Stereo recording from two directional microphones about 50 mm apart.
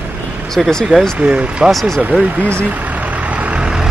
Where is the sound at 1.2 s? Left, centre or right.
Right.